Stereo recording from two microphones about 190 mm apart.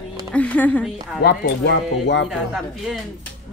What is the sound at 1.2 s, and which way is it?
Speech, 60° left (ahead or behind).